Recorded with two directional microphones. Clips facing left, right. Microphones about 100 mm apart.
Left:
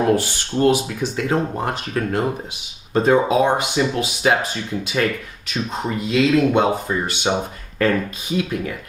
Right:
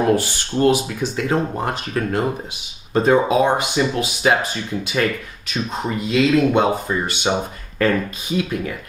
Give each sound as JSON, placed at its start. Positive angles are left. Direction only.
{"t": 0.0, "sound": "speech", "side_deg": -15}